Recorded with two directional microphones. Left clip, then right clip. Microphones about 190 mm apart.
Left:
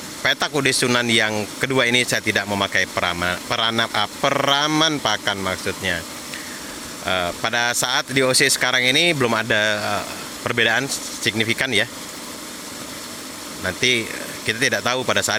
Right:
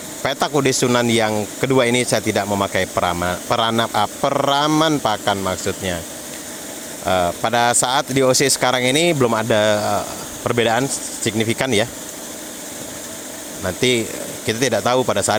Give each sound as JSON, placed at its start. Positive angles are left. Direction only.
{"t": 0.2, "sound": "speech", "side_deg": -15}
{"t": 7.0, "sound": "speech", "side_deg": -15}
{"t": 13.7, "sound": "speech", "side_deg": -15}